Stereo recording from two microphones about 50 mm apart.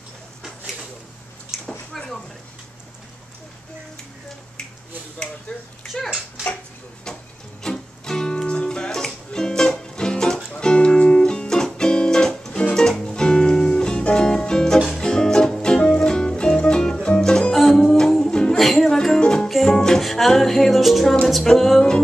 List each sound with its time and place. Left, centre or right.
5.5 s speech: centre
6.0 s speech: centre
7.1 s music: centre
18.6 s music: centre
19.1 s music: centre